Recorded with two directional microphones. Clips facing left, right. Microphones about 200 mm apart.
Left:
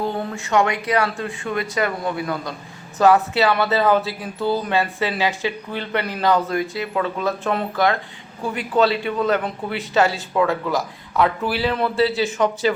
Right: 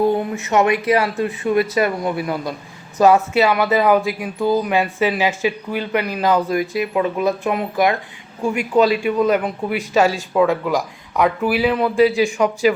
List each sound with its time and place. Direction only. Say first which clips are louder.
0.0 s a man's voice: right 7 dB; 15° right (ahead or behind)
9.0 s speech: right 4 dB; 15° right (ahead or behind)